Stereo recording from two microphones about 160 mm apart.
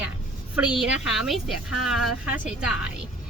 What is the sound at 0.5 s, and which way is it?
A woman's voice, 5° right (ahead or behind).